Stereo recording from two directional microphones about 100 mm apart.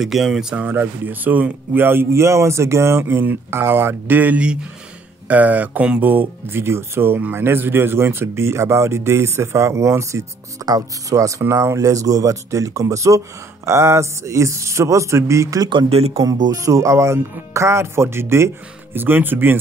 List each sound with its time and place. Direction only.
0.0 s speech: 5° right (ahead or behind)
0.7 s speech: 20° right (ahead or behind)
15.9 s speech: 90° right
16.2 s speech: 35° right (ahead or behind); by 19.5 s 20° right (ahead or behind)